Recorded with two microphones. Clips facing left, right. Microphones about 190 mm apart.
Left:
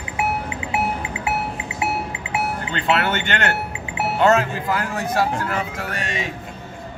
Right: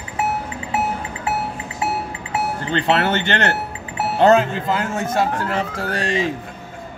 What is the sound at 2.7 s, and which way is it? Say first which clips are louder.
Speech: right 3 dB; 40° right (ahead or behind).